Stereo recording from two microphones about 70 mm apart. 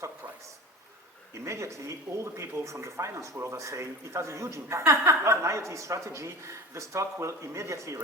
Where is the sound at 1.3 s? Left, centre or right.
Right.